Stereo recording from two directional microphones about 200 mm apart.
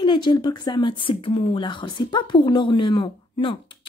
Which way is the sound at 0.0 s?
25° left (ahead or behind).